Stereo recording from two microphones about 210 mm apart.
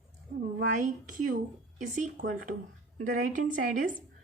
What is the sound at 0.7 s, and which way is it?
Speech, 40° right (ahead or behind).